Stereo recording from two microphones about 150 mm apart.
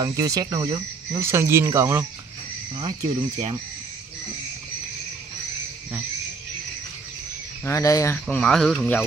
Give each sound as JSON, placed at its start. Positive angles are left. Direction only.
{"t": 0.0, "sound": "speech", "side_deg": -25}
{"t": 3.0, "sound": "speech", "side_deg": -50}
{"t": 7.6, "sound": "speech", "side_deg": 20}
{"t": 8.3, "sound": "speech", "side_deg": 5}